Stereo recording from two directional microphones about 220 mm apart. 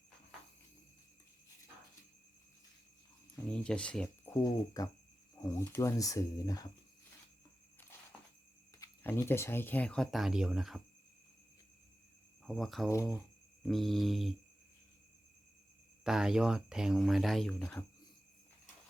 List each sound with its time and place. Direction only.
3.3 s speech: 5° left (ahead or behind)
4.4 s speech: 15° left (ahead or behind)
8.8 s speech: 10° left (ahead or behind)
12.5 s speech: centre (ahead or behind)
12.9 s speech: 15° left (ahead or behind)
13.6 s speech: centre (ahead or behind)
16.0 s speech: centre (ahead or behind)